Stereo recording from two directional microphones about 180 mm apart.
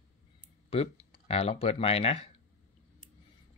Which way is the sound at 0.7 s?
35° left (ahead or behind).